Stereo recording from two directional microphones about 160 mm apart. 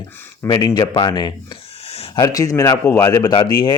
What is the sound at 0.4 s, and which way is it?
Speech, 25° left (ahead or behind).